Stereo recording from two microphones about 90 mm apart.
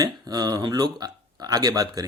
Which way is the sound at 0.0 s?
45° right (ahead or behind).